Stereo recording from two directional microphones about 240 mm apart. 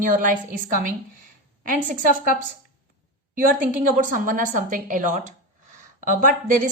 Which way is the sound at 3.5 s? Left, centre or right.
Right.